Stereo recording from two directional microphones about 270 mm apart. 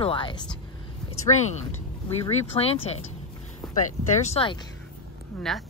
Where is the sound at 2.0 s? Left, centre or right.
Centre.